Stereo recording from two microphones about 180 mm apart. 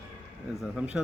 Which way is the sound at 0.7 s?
5° right (ahead or behind).